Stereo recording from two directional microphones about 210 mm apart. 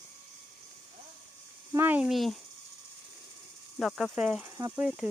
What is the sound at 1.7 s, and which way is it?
Speech, 10° right (ahead or behind).